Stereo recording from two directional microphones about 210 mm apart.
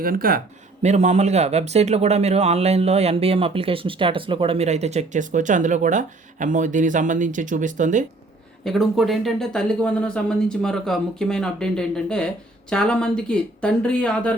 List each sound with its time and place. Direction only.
0.0 s speech: 45° right (ahead or behind)
8.6 s speech: centre (ahead or behind)